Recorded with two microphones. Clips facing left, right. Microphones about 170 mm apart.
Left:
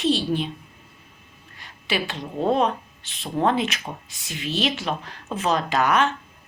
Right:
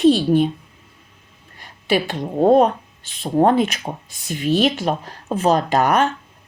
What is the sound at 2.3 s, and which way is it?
A woman's voice, 45° right (ahead or behind).